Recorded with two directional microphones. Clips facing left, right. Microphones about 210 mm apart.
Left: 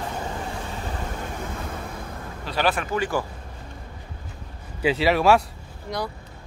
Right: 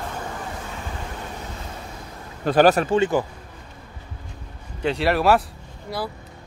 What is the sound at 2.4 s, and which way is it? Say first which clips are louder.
Speech: right 9 dB; 45° right (ahead or behind).